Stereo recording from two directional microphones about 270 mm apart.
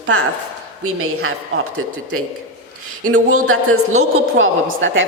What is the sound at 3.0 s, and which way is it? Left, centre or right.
A woman's voice, right.